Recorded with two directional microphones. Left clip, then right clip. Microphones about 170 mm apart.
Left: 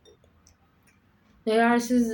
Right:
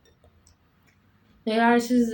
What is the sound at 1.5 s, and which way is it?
Speech, 15° left (ahead or behind).